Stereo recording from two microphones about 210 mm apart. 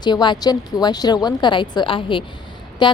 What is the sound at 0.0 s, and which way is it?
A woman's voice, 20° left (ahead or behind).